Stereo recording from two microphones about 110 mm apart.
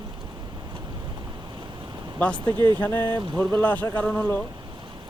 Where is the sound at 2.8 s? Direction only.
20° left (ahead or behind).